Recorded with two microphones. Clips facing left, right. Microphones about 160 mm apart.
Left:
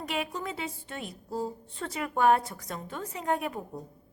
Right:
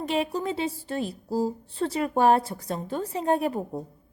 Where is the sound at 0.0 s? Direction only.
30° right (ahead or behind).